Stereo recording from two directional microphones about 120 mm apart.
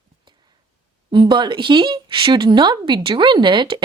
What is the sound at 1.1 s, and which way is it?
Speech, 45° right (ahead or behind).